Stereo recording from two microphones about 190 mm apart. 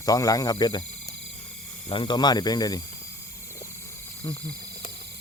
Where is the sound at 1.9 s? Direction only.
25° left (ahead or behind).